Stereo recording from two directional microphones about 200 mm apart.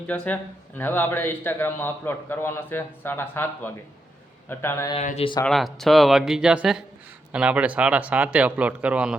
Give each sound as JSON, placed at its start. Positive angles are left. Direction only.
{"t": 0.1, "sound": "a man's voice", "side_deg": 10}
{"t": 4.9, "sound": "speech", "side_deg": 30}
{"t": 5.5, "sound": "speech", "side_deg": 0}